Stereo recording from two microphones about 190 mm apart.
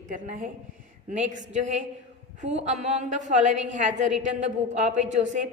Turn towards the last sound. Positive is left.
turn(degrees=-40)  # may be behind; listen again after turning